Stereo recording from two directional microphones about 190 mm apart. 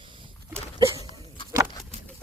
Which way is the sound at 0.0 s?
25° right (ahead or behind).